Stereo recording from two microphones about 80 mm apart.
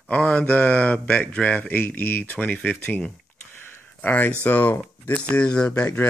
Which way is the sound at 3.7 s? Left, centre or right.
Left.